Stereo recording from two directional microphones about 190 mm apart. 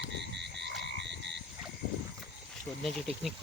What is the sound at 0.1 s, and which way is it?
Frog, 65° right (ahead or behind).